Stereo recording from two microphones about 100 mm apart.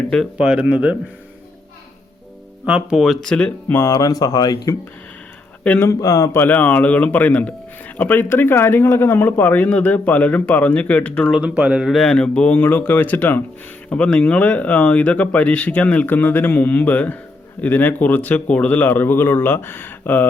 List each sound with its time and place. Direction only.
0.3 s speech: 10° right (ahead or behind)
2.6 s speech: 10° right (ahead or behind); by 3.5 s 5° left (ahead or behind)
3.7 s speech: 30° left (ahead or behind)
5.8 s speech: 35° left (ahead or behind)
6.3 s speech: 20° left (ahead or behind)
11.3 s speech: 10° right (ahead or behind)
11.9 s speech: 10° left (ahead or behind)